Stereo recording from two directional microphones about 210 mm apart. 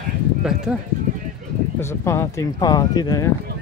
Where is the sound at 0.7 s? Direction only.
5° right (ahead or behind).